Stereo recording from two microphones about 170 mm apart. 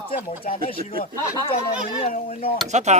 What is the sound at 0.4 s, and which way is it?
Speech, 30° left (ahead or behind).